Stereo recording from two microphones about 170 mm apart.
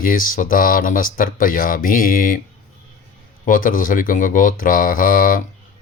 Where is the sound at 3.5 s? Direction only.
50° left (ahead or behind).